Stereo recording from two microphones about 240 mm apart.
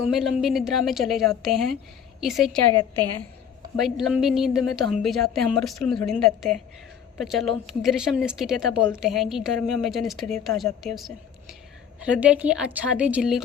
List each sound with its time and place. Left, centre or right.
0.0 s a woman's voice: centre
3.8 s a woman's voice: centre